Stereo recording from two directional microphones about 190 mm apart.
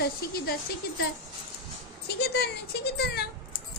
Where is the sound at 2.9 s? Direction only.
60° left (ahead or behind).